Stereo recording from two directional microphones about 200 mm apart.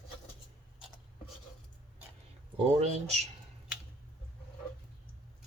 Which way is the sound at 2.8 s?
35° right (ahead or behind).